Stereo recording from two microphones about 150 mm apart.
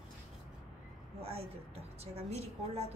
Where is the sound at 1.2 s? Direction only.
40° right (ahead or behind).